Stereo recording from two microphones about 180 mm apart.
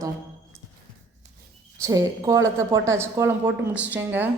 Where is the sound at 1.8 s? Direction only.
20° right (ahead or behind).